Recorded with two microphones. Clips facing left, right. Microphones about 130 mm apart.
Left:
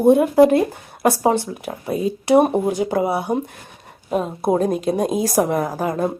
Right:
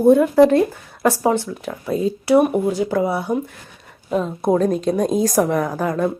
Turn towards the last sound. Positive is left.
turn(degrees=25)  # may be behind; listen again after turning